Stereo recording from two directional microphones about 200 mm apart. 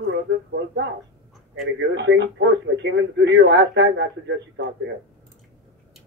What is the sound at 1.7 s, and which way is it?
Speech, 60° right (ahead or behind).